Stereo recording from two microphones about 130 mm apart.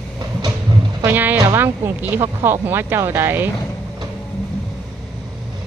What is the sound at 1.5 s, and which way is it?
Speech, 15° right (ahead or behind).